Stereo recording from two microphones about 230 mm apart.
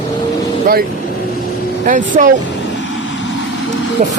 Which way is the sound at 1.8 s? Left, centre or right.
Right.